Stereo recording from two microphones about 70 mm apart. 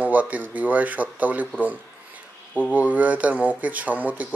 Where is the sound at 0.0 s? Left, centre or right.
Right.